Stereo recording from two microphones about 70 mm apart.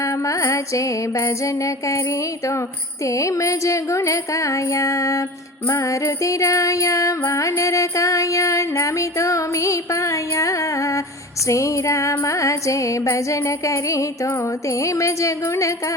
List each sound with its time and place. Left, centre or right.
0.0 s music: left